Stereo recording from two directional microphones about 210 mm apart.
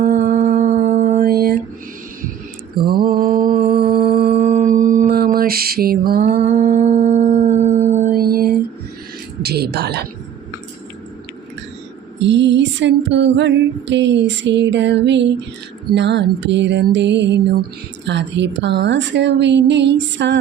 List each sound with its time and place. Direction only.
0.0 s a sound: 45° right (ahead or behind)
1.2 s a sound: 45° right (ahead or behind)
2.8 s mantra: 45° right (ahead or behind)
4.3 s mantra: 35° right (ahead or behind)
9.4 s speech: 50° right (ahead or behind)
12.2 s female singing: 60° right (ahead or behind)